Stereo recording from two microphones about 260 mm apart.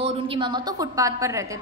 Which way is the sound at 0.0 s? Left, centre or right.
Right.